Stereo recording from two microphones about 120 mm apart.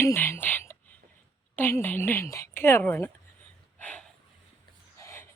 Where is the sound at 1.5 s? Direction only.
20° left (ahead or behind).